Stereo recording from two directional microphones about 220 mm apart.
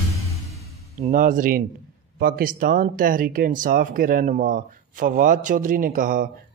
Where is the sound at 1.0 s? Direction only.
35° right (ahead or behind).